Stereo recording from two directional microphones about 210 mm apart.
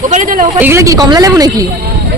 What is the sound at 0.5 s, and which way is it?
Speech, 10° right (ahead or behind).